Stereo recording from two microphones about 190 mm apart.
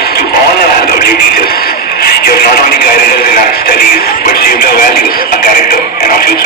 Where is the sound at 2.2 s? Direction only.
55° left (ahead or behind).